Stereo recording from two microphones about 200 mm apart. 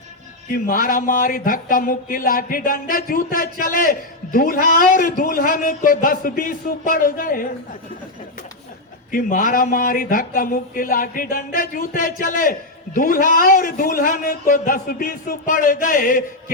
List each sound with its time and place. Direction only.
0.4 s speech: 45° left (ahead or behind)
9.1 s speech: 45° left (ahead or behind)